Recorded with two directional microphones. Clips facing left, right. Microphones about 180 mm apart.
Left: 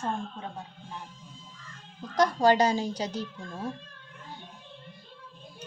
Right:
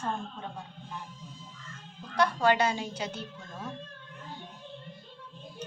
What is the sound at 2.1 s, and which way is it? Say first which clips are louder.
A woman's voice: left 3 dB; 40° left (ahead or behind).